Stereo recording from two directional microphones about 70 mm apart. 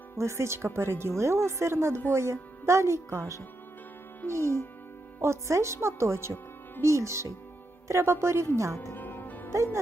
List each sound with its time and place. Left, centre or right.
0.2 s speech: right
9.0 s music: left